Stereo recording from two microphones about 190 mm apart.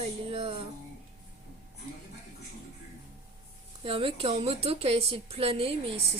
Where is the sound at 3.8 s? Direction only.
30° right (ahead or behind).